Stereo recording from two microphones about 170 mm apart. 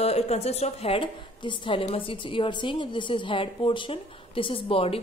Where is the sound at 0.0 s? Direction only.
40° left (ahead or behind).